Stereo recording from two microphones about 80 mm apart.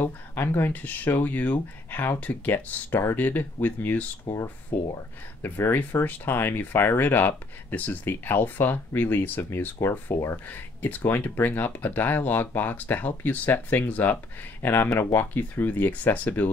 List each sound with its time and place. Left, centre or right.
0.0 s speech: left